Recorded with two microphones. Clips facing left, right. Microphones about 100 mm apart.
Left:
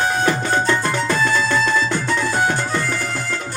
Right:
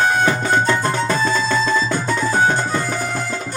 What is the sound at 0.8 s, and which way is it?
Music, 45° right (ahead or behind).